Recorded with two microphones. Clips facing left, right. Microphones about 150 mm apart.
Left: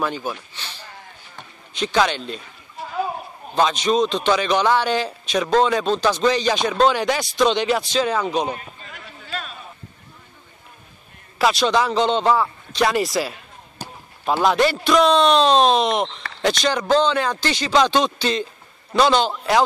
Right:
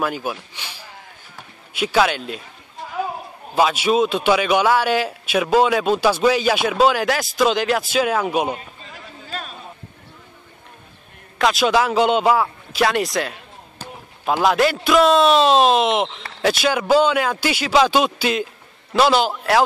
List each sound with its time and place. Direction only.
0.0 s speech: 10° right (ahead or behind)
3.5 s a man's voice: 5° right (ahead or behind)
8.9 s a sound: 40° right (ahead or behind)
11.3 s a man's voice: centre (ahead or behind)
13.8 s basketball bounce: 15° left (ahead or behind)
14.2 s a man's voice: centre (ahead or behind)